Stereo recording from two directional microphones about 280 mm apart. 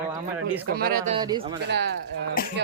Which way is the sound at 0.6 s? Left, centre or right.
Right.